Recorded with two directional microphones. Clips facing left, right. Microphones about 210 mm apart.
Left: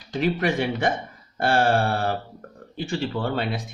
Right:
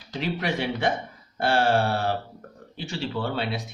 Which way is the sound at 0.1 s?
50° left (ahead or behind).